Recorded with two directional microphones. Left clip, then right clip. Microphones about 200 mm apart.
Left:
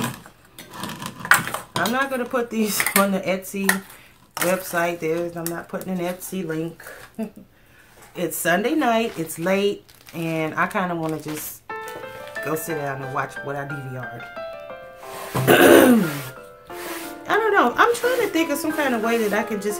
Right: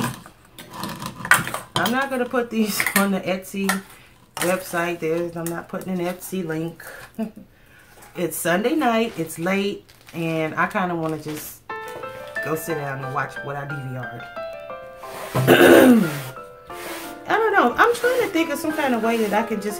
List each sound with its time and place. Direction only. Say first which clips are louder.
0.7 s cutlery: right 1 dB; 5° left (ahead or behind)
2.0 s speech: even; 15° left (ahead or behind)
11.6 s music: right 3 dB; centre (ahead or behind)
12.7 s speech: even; centre (ahead or behind)
13.7 s music: even; centre (ahead or behind)
15.4 s speech: right 1 dB; 15° left (ahead or behind)
16.7 s music: left 1 dB; centre (ahead or behind)
17.3 s music: even; 15° left (ahead or behind)
17.7 s speech: right 1 dB; 15° left (ahead or behind)